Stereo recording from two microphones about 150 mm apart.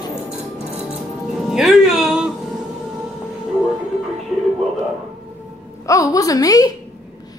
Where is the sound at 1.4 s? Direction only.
Centre (ahead or behind).